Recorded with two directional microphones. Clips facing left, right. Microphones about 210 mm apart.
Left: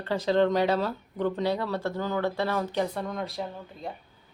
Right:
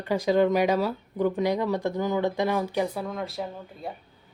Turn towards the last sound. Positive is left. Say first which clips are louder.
# right 1 dB
turn(degrees=0)  # may be behind; listen again after turning